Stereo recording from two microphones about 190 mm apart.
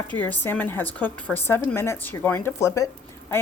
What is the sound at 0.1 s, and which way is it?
A woman's voice, 10° left (ahead or behind).